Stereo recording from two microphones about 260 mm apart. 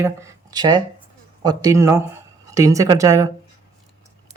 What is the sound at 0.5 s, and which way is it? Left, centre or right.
Speech, centre.